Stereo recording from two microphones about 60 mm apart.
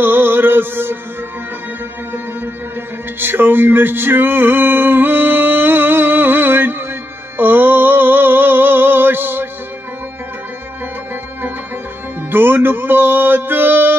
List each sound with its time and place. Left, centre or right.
0.0 s music: right
3.2 s male singing: right
7.3 s music: right
12.3 s music: right